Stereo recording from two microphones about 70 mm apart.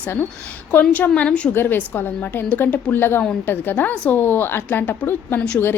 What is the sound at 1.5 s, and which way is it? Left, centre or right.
A woman's voice, left.